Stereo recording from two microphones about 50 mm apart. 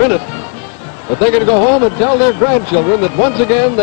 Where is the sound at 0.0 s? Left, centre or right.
Centre.